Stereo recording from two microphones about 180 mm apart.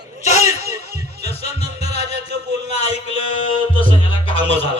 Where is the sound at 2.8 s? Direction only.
30° left (ahead or behind).